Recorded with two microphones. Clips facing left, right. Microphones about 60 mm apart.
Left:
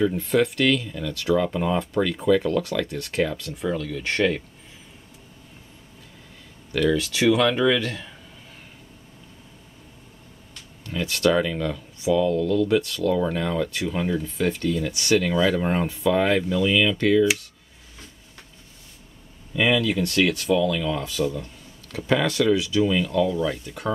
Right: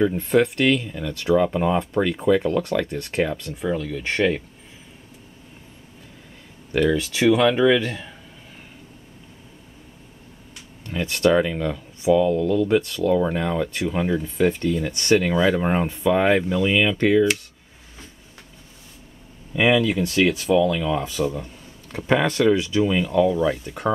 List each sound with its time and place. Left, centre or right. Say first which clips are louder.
0.0 s speech: right 2 dB; centre
6.7 s speech: right 2 dB; centre
10.5 s speech: right 1 dB; centre
19.6 s speech: right 3 dB; centre
21.9 s speech: right 2 dB; right